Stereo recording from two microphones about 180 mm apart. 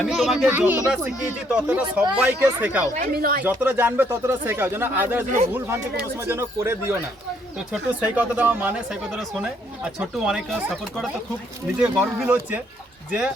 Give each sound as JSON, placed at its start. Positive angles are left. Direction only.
{"t": 0.0, "sound": "speech", "side_deg": 0}
{"t": 3.0, "sound": "speech", "side_deg": -55}
{"t": 3.4, "sound": "speech", "side_deg": -10}
{"t": 11.8, "sound": "speech", "side_deg": -10}